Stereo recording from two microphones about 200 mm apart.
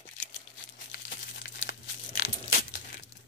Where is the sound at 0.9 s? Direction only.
60° left (ahead or behind).